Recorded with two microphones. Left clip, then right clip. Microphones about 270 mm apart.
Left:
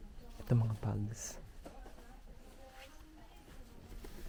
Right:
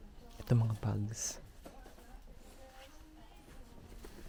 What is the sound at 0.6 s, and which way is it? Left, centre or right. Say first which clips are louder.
Speech: right 2 dB; right.